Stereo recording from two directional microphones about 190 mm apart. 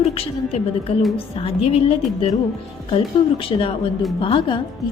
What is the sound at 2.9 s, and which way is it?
A woman's voice, 30° left (ahead or behind).